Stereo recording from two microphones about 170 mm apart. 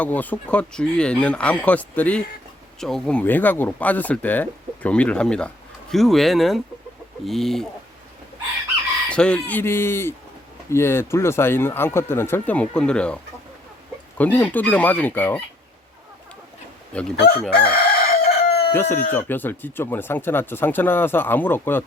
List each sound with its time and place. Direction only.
0.0 s speech: 10° left (ahead or behind)
9.0 s speech: 5° left (ahead or behind)
14.2 s speech: 10° left (ahead or behind)
16.9 s speech: 5° left (ahead or behind)
17.5 s chicken: 65° left (ahead or behind)
18.7 s speech: 10° left (ahead or behind)